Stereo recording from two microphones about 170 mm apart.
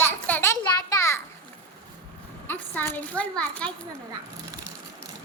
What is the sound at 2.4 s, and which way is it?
A child's voice, 10° left (ahead or behind).